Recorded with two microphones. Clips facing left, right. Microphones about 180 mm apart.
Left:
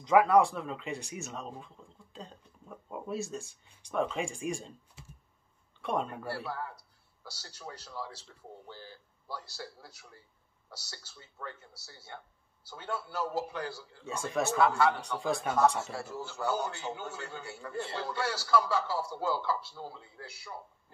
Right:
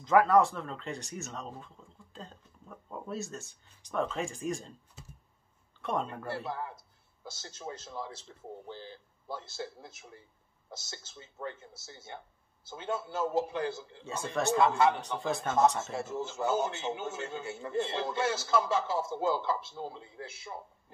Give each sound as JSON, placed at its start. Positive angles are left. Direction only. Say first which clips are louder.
{"t": 0.0, "sound": "speech", "louder": "even", "side_deg": 0}
{"t": 5.8, "sound": "speech", "louder": "even", "side_deg": 0}
{"t": 6.5, "sound": "a man's voice", "louder": "right 1 dB", "side_deg": -20}
{"t": 14.3, "sound": "speech", "louder": "right 2 dB", "side_deg": 0}
{"t": 14.6, "sound": "a man's voice", "louder": "even", "side_deg": -20}
{"t": 15.1, "sound": "speech", "louder": "left 1 dB", "side_deg": 0}
{"t": 15.9, "sound": "a man's voice", "louder": "right 4 dB", "side_deg": -20}